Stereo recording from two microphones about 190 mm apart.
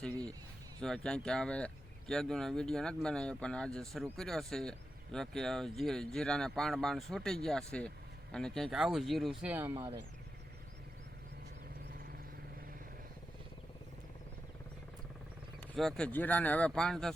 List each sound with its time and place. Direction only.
0.8 s speech: 5° left (ahead or behind)
9.7 s speech: 25° right (ahead or behind)
15.6 s speech: centre (ahead or behind)